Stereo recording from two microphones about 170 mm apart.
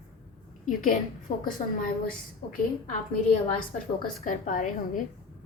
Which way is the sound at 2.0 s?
55° left (ahead or behind).